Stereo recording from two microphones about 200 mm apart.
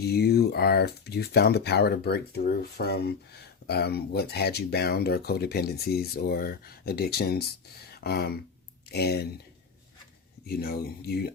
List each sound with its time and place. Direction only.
0.0 s speech: 55° left (ahead or behind)
10.4 s speech: 50° left (ahead or behind)